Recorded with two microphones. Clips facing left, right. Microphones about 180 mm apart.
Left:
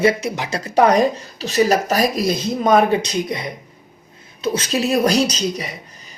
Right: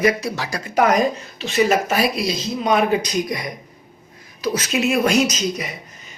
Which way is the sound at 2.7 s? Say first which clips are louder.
Left 2 dB; 30° left (ahead or behind).